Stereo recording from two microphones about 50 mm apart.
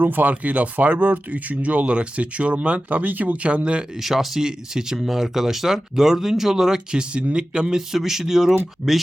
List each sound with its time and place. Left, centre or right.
0.0 s speech: right; by 3.8 s centre
3.9 s speech: centre
7.8 s speech: centre